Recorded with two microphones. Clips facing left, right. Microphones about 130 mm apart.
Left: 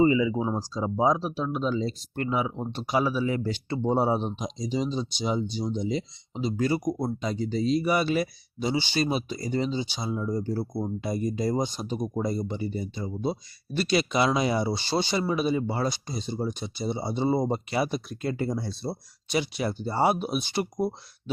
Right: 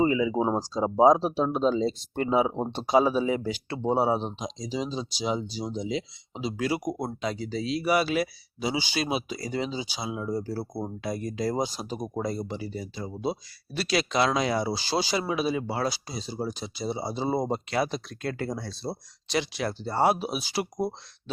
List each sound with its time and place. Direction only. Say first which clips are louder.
0.0 s speech: left 2 dB; 5° right (ahead or behind)
0.3 s speech: right 3 dB; 25° right (ahead or behind)
3.5 s speech: left 1 dB; 5° right (ahead or behind)